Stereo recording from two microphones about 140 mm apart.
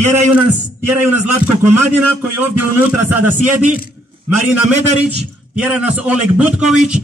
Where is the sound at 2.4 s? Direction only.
15° right (ahead or behind).